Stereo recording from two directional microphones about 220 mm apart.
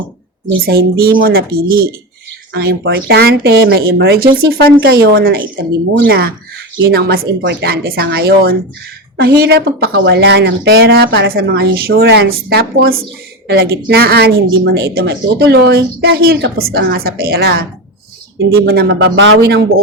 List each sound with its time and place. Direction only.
0.6 s a woman's voice: 45° right (ahead or behind)